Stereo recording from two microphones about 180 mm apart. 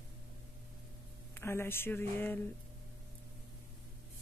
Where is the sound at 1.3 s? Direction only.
15° left (ahead or behind).